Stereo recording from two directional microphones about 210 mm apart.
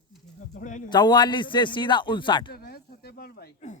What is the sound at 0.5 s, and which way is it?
Speech, 35° left (ahead or behind).